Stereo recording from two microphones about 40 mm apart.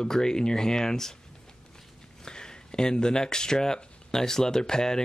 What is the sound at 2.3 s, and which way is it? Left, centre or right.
Speech, centre.